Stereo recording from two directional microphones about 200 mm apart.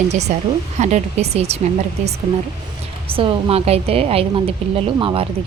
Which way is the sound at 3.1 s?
25° right (ahead or behind).